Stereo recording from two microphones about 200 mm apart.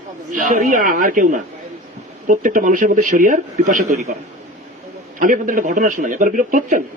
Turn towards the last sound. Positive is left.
turn(degrees=-40)  # may be behind; listen again after turning